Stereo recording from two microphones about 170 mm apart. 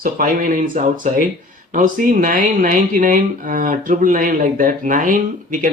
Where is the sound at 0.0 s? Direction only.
55° right (ahead or behind).